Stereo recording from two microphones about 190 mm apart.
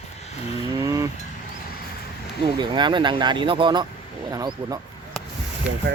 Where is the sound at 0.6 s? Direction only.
15° right (ahead or behind).